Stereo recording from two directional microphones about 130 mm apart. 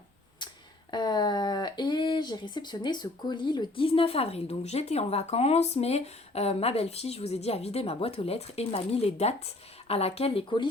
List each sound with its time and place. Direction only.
0.9 s speech: 35° left (ahead or behind)